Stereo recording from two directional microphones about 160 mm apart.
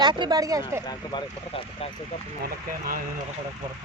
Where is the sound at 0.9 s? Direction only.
30° left (ahead or behind).